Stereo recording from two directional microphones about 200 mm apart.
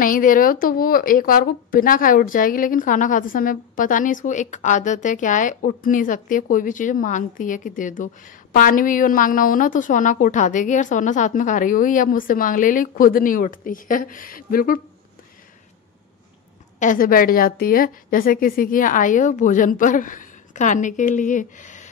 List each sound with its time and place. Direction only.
0.0 s speech: 45° left (ahead or behind)
16.8 s speech: 45° left (ahead or behind)